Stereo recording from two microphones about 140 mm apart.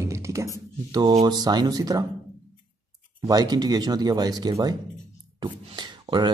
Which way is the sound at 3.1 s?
30° right (ahead or behind).